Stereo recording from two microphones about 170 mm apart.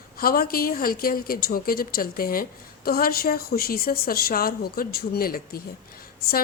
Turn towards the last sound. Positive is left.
turn(degrees=65)  # may be behind; listen again after turning